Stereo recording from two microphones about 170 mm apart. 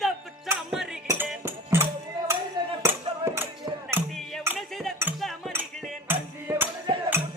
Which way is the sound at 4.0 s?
10° right (ahead or behind).